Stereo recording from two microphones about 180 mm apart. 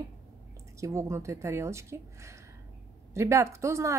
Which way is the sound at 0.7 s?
15° right (ahead or behind).